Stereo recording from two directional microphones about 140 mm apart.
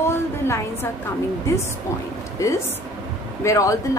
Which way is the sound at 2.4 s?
20° left (ahead or behind).